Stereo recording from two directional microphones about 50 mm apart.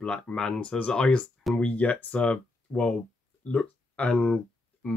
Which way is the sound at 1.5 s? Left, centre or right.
Left.